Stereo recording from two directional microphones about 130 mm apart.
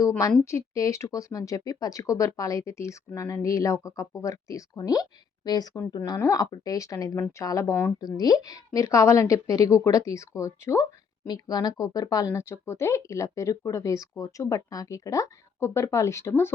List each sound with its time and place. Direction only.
0.4 s a woman's voice: 20° left (ahead or behind)